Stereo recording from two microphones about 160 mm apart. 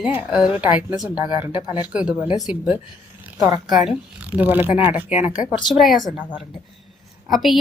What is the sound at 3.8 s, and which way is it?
A woman's voice, 5° right (ahead or behind).